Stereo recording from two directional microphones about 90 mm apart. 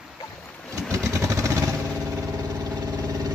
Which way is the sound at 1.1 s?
35° right (ahead or behind).